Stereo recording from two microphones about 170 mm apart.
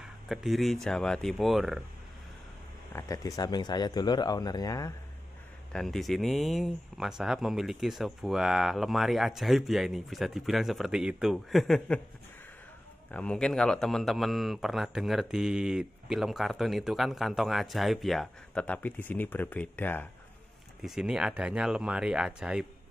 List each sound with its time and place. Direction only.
0.3 s speech: centre (ahead or behind)
2.9 s speech: 15° left (ahead or behind)
5.7 s speech: centre (ahead or behind)
13.1 s speech: 5° left (ahead or behind)
20.8 s speech: 5° right (ahead or behind)